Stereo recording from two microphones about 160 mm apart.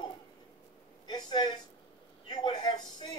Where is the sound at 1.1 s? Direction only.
25° left (ahead or behind).